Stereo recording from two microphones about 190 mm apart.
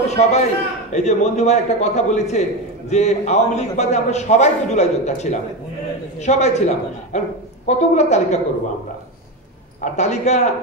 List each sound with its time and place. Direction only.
0.1 s a man's voice: 35° left (ahead or behind)
9.8 s a man's voice: 35° left (ahead or behind)